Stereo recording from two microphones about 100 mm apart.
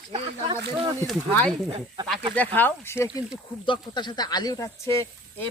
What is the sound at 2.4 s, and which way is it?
Speech, 20° left (ahead or behind).